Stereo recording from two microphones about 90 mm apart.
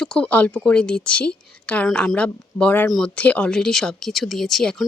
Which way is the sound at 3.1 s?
15° left (ahead or behind).